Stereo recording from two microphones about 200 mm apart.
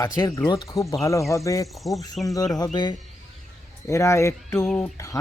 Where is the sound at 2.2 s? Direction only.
20° left (ahead or behind).